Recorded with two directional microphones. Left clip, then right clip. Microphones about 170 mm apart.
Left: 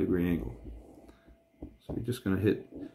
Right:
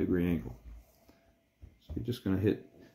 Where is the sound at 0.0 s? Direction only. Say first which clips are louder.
Left 2 dB; 10° right (ahead or behind).